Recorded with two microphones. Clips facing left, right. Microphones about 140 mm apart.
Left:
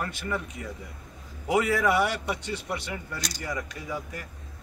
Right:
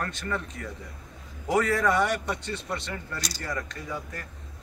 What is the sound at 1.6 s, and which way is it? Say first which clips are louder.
Speech: even; 5° left (ahead or behind).